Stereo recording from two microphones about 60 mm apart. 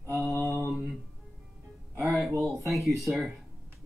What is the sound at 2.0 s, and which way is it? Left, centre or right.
Speech, centre.